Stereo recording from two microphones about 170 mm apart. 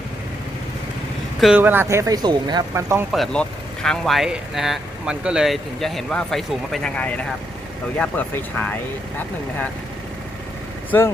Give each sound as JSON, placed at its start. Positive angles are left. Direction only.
{"t": 1.4, "sound": "speech", "side_deg": -5}
{"t": 3.1, "sound": "speech", "side_deg": 0}